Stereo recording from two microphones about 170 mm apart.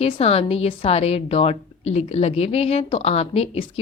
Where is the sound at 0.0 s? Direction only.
35° left (ahead or behind).